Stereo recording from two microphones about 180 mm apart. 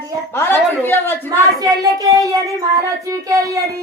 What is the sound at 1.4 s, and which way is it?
Speech, 20° right (ahead or behind).